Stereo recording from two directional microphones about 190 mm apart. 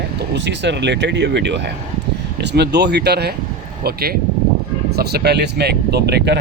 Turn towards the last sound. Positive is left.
turn(degrees=-60)  # may be behind; listen again after turning